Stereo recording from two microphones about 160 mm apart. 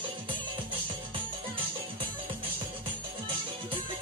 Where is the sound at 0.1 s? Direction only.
30° right (ahead or behind).